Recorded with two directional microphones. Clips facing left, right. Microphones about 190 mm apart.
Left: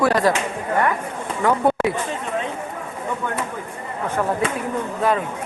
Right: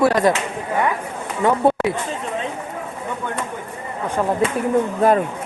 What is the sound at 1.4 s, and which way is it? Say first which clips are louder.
Speech: right 2 dB; 20° right (ahead or behind).